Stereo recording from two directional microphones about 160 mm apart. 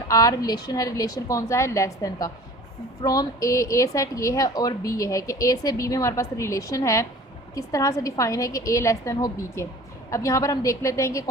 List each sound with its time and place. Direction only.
0.1 s a woman's voice: 20° left (ahead or behind)